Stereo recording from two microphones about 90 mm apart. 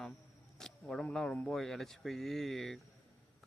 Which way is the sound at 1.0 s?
10° left (ahead or behind).